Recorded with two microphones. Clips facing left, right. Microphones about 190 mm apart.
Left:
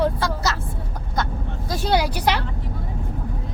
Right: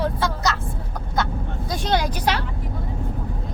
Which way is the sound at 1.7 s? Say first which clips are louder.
Left 2 dB; 10° left (ahead or behind).